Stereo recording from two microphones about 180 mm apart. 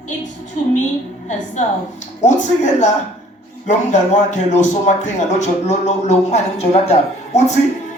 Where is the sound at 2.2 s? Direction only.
40° left (ahead or behind).